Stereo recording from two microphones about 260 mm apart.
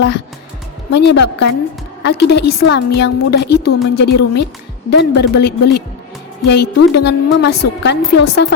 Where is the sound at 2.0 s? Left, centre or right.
Left.